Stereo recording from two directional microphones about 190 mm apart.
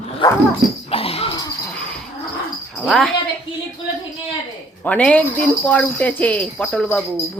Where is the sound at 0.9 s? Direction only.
30° left (ahead or behind).